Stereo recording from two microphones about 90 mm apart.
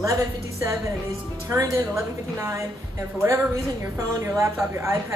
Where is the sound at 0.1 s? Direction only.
35° right (ahead or behind).